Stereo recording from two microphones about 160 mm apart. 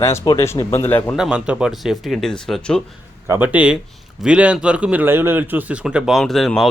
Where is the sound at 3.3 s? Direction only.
10° right (ahead or behind).